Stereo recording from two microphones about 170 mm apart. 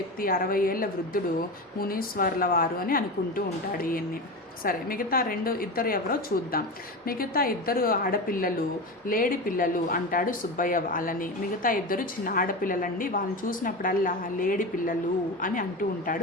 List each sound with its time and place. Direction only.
0.2 s a woman's voice: 55° left (ahead or behind)